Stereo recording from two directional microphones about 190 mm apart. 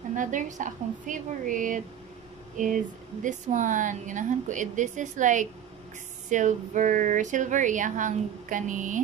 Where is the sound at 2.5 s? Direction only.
45° right (ahead or behind).